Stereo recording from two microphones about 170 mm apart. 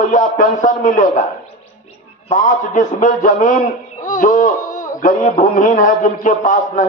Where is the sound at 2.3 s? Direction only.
45° left (ahead or behind).